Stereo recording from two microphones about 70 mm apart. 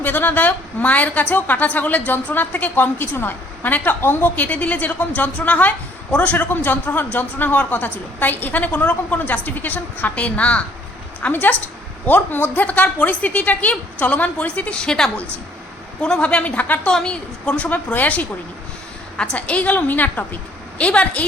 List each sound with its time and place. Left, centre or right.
0.0 s a woman's voice: left